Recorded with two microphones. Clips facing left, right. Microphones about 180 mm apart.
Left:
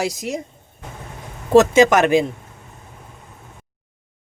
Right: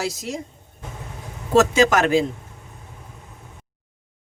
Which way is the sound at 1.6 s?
20° left (ahead or behind).